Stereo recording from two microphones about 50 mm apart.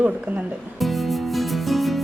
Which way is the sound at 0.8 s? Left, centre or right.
Centre.